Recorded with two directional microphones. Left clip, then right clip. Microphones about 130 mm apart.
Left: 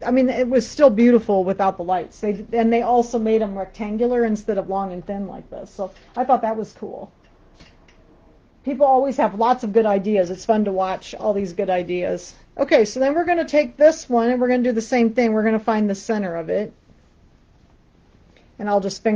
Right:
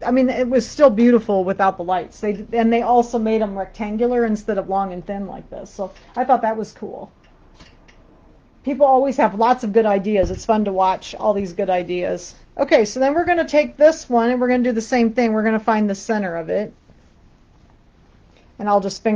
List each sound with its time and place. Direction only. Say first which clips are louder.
0.0 s a woman's voice: right 1 dB; 25° left (ahead or behind)
4.8 s speech: right 1 dB; centre (ahead or behind)
8.6 s speech: right 2 dB; 25° right (ahead or behind)
9.7 s speech: right 1 dB; centre (ahead or behind)
10.3 s a woman's voice: right 1 dB; 20° left (ahead or behind)
18.6 s a woman's voice: right 2 dB; 20° left (ahead or behind)